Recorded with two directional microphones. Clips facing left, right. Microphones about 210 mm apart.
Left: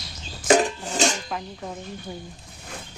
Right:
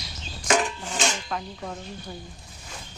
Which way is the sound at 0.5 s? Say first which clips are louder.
Left 5 dB; 40° left (ahead or behind).